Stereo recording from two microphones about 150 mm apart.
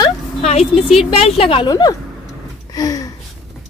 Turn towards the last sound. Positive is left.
turn(degrees=25)  # may be behind; listen again after turning